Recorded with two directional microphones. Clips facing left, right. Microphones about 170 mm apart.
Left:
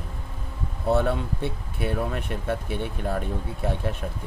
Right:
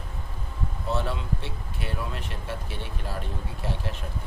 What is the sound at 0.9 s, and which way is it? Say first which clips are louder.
Speech: left 7 dB; 55° left (ahead or behind).